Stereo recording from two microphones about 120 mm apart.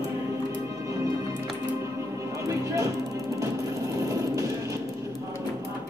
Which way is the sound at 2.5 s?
25° right (ahead or behind).